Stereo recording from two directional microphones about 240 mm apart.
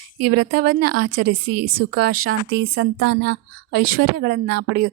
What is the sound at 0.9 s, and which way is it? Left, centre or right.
Speech, right.